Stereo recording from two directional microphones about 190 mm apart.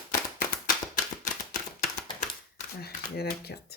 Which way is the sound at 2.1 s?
50° left (ahead or behind).